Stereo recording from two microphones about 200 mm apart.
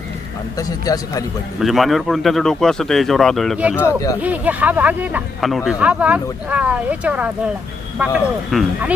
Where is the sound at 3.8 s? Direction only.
15° left (ahead or behind).